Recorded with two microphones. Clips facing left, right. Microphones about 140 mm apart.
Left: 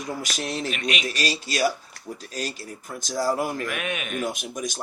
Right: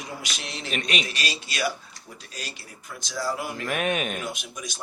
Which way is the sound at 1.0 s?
40° left (ahead or behind).